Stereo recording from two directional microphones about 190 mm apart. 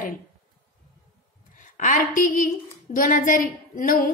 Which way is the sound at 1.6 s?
45° left (ahead or behind).